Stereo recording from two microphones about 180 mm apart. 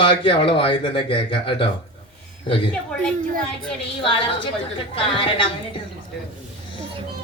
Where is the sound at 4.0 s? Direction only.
30° left (ahead or behind).